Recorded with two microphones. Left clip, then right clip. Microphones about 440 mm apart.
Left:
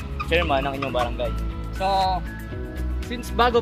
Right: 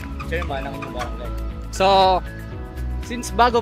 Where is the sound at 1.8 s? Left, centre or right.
Right.